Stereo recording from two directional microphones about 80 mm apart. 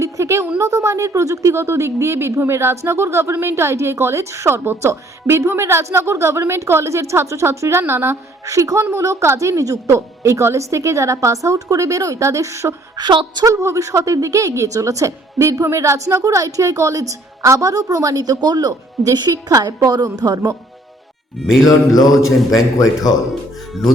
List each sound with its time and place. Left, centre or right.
0.0 s a sound: right
0.6 s a woman's voice: right
8.4 s a woman's voice: right
13.0 s a woman's voice: right
13.4 s a woman's voice: right
19.5 s a woman's voice: right
21.3 s music: centre
21.7 s mantra: left